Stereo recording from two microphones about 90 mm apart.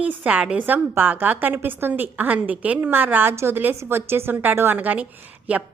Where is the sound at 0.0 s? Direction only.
15° right (ahead or behind).